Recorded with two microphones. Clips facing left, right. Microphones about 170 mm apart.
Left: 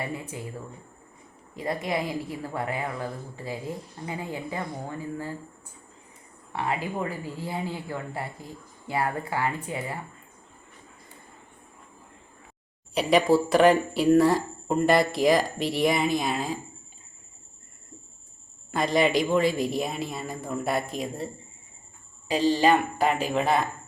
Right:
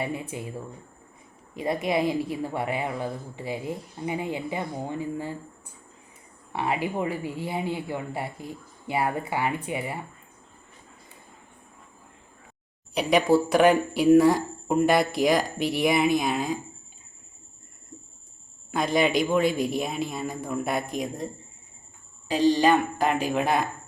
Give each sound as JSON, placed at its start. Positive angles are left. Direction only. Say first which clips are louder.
{"t": 0.0, "sound": "a woman's voice", "louder": "right 3 dB", "side_deg": -20}
{"t": 1.5, "sound": "a woman's voice", "louder": "right 3 dB", "side_deg": -20}
{"t": 6.5, "sound": "a woman's voice", "louder": "right 2 dB", "side_deg": -20}
{"t": 12.9, "sound": "speech", "louder": "even", "side_deg": 0}
{"t": 18.7, "sound": "speech", "louder": "even", "side_deg": 0}
{"t": 22.3, "sound": "speech", "louder": "right 1 dB", "side_deg": 5}
{"t": 23.3, "sound": "speech", "louder": "even", "side_deg": -5}